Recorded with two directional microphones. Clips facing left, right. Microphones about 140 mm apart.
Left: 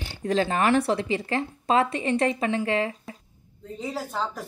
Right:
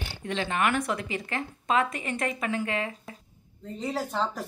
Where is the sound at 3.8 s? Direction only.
Centre (ahead or behind).